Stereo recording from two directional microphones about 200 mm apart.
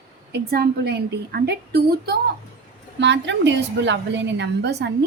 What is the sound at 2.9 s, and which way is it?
A woman's voice, 65° right (ahead or behind).